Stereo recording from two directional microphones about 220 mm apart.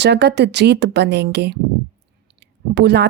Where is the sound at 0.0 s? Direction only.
50° right (ahead or behind).